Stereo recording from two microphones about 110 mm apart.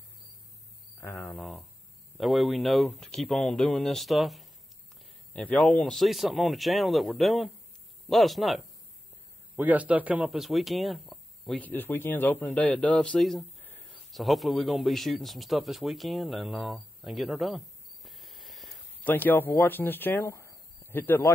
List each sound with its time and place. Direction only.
1.1 s speech: centre (ahead or behind)
5.3 s speech: 10° left (ahead or behind)
9.6 s a man's voice: 15° right (ahead or behind)
10.3 s speech: centre (ahead or behind)
11.6 s speech: 20° left (ahead or behind); by 13.5 s centre (ahead or behind)
13.6 s a sound: 15° left (ahead or behind)
14.1 s speech: centre (ahead or behind)
19.0 s speech: 15° left (ahead or behind)